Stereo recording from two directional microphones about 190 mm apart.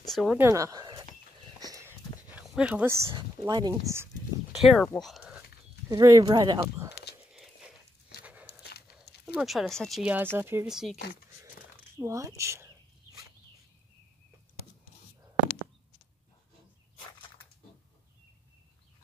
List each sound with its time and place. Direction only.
0.0 s a sound: centre (ahead or behind)
0.4 s a sound: 15° right (ahead or behind)
2.3 s speech: 5° right (ahead or behind)
3.1 s speech: 25° right (ahead or behind)
4.6 s speech: centre (ahead or behind)
5.9 s speech: 20° right (ahead or behind)
7.3 s a sound: centre (ahead or behind)
8.2 s walk: 5° right (ahead or behind)
8.6 s dog: 55° left (ahead or behind)
8.9 s speech: 5° right (ahead or behind)
12.0 s speech: 15° right (ahead or behind)